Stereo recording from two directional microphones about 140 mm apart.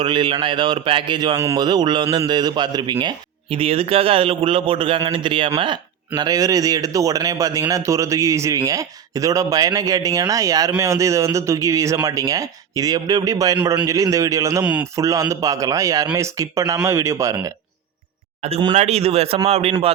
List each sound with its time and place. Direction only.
0.0 s a man's voice: 35° right (ahead or behind)
14.6 s a man's voice: 10° right (ahead or behind)
14.9 s a man's voice: 25° right (ahead or behind)
18.7 s a man's voice: 50° right (ahead or behind)